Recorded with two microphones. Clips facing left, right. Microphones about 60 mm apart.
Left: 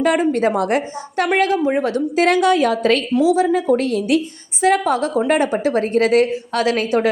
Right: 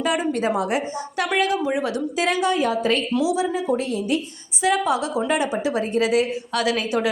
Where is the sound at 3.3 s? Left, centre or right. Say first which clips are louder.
Left 6 dB; left.